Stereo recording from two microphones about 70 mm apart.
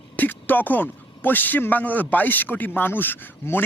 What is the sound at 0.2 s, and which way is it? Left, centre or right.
A man's voice, left.